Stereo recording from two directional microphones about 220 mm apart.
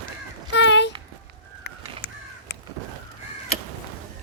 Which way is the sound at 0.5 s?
55° left (ahead or behind).